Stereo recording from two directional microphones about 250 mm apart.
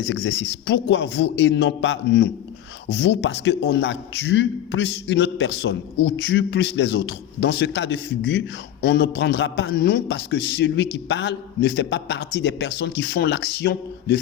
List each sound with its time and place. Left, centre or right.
0.0 s a man's voice: left